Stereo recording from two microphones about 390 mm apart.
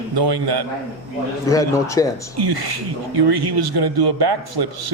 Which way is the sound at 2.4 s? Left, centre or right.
Right.